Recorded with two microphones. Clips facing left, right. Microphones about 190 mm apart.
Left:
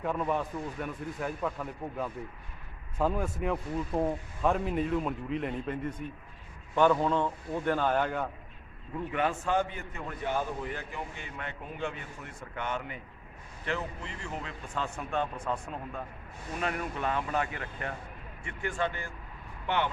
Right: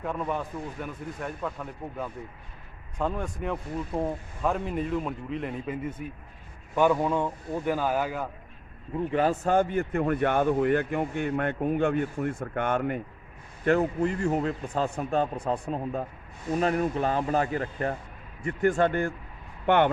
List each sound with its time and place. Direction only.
0.0 s speech: centre (ahead or behind)
9.1 s a man's voice: 35° right (ahead or behind); by 19.9 s 55° right (ahead or behind)